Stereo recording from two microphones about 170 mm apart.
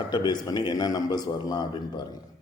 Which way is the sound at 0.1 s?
25° left (ahead or behind).